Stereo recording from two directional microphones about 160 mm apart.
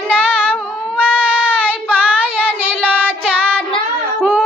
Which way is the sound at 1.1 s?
10° left (ahead or behind).